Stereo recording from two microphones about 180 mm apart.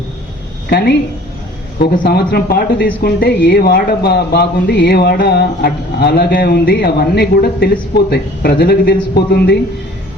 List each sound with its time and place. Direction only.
0.7 s speech: 65° left (ahead or behind)